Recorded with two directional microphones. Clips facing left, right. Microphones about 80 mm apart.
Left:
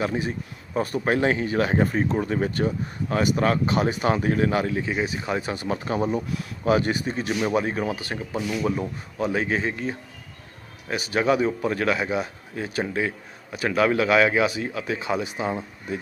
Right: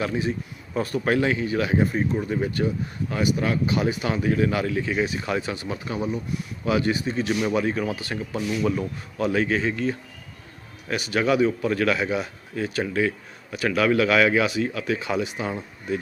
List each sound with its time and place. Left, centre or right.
0.0 s speech: left
5.5 s speech: left
6.7 s speech: left